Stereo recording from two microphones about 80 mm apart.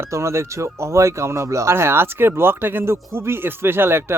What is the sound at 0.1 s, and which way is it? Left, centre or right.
Speech, right.